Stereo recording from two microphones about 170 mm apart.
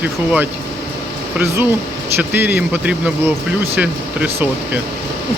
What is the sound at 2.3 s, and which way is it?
Speech, 10° right (ahead or behind).